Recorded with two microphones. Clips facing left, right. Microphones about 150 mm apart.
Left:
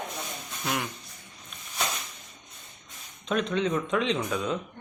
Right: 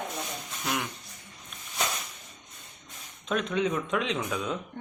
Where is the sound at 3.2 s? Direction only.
5° right (ahead or behind).